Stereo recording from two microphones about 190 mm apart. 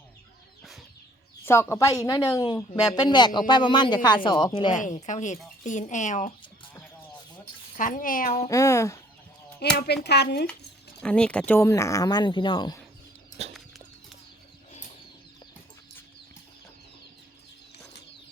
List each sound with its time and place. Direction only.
0.6 s chicken: centre (ahead or behind)
1.5 s speech: 15° left (ahead or behind)
4.8 s speech: 40° left (ahead or behind)
7.8 s speech: 45° left (ahead or behind)
8.3 s speech: 15° left (ahead or behind)
9.7 s speech: 60° left (ahead or behind)
11.0 s speech: 5° left (ahead or behind); by 12.8 s 25° left (ahead or behind)
13.4 s bird flight: 35° right (ahead or behind)